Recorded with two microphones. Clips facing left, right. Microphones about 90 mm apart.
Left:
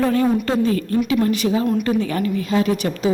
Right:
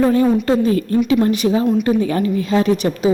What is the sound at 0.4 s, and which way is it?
Speech, 25° right (ahead or behind).